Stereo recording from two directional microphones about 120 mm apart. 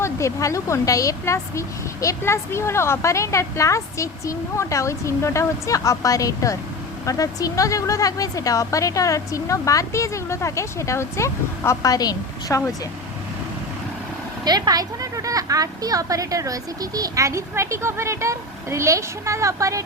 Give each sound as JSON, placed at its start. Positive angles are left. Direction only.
{"t": 0.0, "sound": "speech", "side_deg": 25}
{"t": 14.4, "sound": "speech", "side_deg": -35}